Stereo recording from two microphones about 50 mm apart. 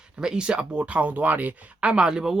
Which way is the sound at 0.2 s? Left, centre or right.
Centre.